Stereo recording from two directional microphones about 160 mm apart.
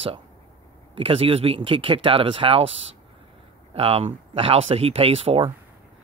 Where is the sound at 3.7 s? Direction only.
35° right (ahead or behind).